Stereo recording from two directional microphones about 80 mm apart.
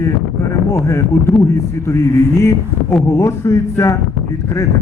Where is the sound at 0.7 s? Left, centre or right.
Left.